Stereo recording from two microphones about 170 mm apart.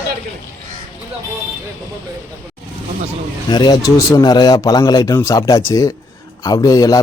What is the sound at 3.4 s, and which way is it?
A man's voice, 25° left (ahead or behind).